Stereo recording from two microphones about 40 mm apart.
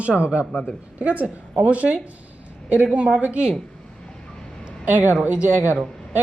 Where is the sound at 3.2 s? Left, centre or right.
Right.